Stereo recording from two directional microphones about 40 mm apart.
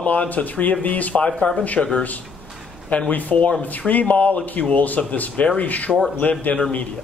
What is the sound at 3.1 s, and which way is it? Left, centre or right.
Speech, left.